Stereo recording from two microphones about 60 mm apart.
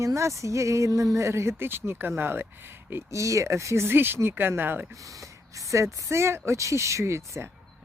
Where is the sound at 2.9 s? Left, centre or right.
Right.